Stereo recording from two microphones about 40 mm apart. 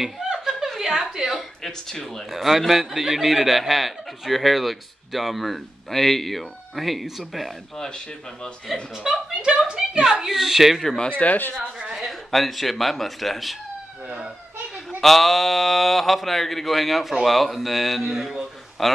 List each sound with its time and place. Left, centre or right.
0.0 s chuckle: centre
0.7 s a woman's voice: centre
1.3 s speech: centre
2.3 s speech: centre
9.3 s speech: right
10.0 s speech: centre
11.1 s speech: left
11.9 s speech: centre
15.0 s speech: centre
18.8 s speech: centre